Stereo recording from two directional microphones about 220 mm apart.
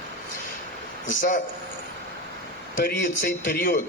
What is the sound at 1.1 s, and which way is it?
Speech, 40° left (ahead or behind).